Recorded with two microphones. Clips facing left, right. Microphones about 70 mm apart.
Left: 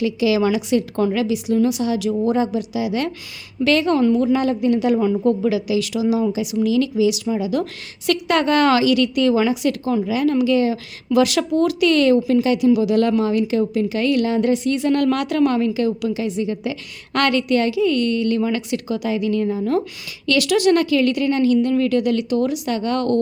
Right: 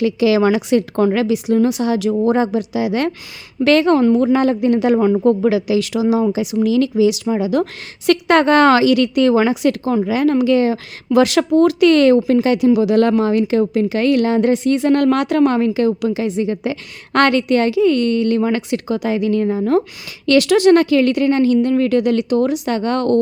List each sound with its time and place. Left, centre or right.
0.0 s a woman's voice: right